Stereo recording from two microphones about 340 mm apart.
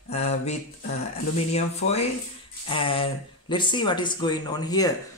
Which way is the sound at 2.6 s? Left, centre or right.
Centre.